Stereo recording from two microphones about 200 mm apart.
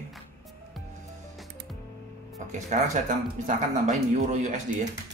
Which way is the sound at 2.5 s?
35° right (ahead or behind).